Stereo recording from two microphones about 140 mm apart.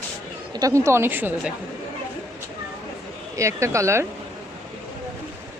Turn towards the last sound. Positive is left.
turn(degrees=-20)  # may be behind; listen again after turning